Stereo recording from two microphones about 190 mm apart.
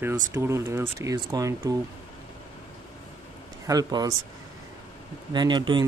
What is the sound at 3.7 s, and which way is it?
Speech, 20° right (ahead or behind).